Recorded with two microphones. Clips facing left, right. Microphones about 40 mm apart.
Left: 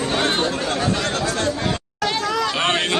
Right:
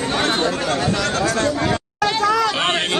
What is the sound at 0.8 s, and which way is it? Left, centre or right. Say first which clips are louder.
Chatter: right 2 dB; right.